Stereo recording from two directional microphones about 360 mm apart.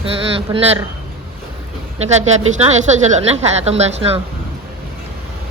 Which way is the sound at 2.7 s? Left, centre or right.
Centre.